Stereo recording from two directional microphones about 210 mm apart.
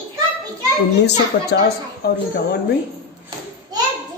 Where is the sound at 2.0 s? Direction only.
50° left (ahead or behind).